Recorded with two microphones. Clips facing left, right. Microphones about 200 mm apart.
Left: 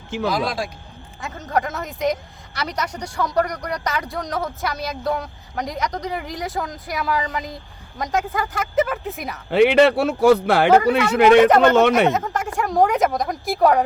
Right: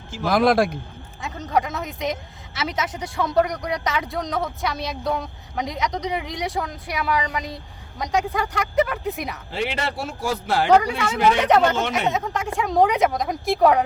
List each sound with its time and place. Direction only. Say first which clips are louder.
0.3 s speech: right 7 dB; 55° right (ahead or behind)
1.2 s speech: even; centre (ahead or behind)
9.5 s speech: left 15 dB; 65° left (ahead or behind)
11.9 s speech: left 6 dB; centre (ahead or behind)